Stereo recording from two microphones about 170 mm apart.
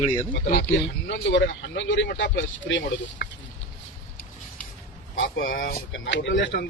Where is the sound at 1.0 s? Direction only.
90° left.